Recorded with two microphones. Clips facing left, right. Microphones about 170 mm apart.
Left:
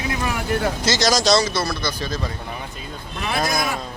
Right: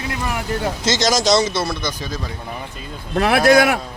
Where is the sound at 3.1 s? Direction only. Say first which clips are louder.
Right 11 dB; 75° right (ahead or behind).